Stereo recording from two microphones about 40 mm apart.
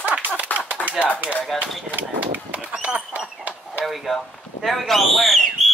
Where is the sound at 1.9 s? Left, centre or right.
Right.